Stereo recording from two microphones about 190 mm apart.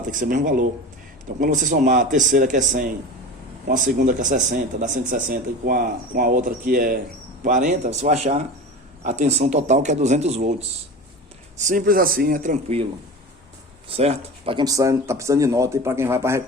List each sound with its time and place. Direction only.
0.0 s speech: 45° right (ahead or behind)
11.5 s speech: 40° right (ahead or behind)
13.8 s speech: 30° right (ahead or behind); by 16.4 s 15° right (ahead or behind)